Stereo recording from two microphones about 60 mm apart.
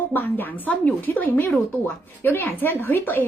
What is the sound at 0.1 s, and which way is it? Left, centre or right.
A woman's voice, left.